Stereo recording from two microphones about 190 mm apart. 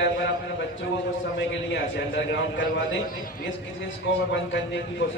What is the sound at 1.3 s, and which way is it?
A man's voice, 65° left (ahead or behind).